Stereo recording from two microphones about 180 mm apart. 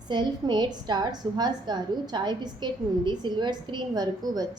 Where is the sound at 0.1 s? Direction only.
25° right (ahead or behind).